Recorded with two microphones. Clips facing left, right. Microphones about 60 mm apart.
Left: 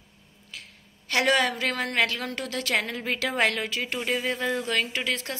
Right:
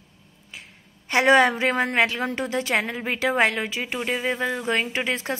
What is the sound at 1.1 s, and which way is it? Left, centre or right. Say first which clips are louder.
A woman's voice: right 6 dB; right.